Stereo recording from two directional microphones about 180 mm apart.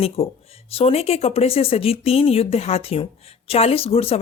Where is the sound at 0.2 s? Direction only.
35° left (ahead or behind).